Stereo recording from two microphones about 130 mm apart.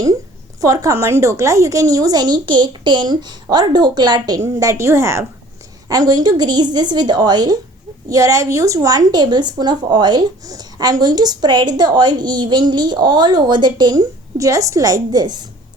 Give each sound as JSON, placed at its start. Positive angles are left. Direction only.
{"t": 0.6, "sound": "a woman's voice", "side_deg": -25}